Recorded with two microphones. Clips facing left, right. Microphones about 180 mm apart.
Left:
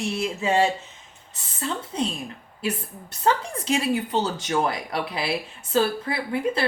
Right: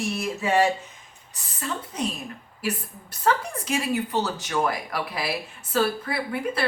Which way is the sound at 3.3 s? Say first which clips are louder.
Left 1 dB; 25° left (ahead or behind).